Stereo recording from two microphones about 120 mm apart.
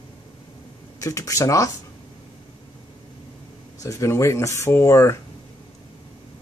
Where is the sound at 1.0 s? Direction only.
25° left (ahead or behind).